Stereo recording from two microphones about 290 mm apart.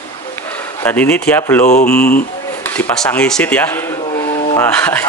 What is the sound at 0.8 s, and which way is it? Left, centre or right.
Speech, centre.